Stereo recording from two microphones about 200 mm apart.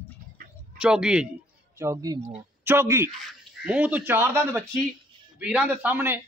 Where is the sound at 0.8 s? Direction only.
5° right (ahead or behind).